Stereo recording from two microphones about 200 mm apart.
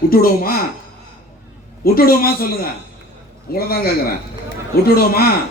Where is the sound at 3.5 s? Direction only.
50° left (ahead or behind).